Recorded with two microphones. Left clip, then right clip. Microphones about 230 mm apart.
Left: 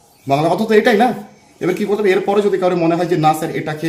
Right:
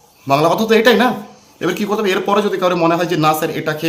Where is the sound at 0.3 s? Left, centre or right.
Centre.